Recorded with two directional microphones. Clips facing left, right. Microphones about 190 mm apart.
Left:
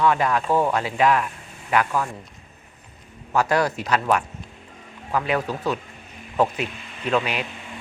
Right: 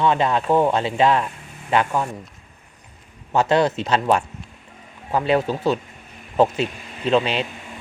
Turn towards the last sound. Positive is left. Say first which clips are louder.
# right 4 dB
turn(degrees=-25)  # may be behind; listen again after turning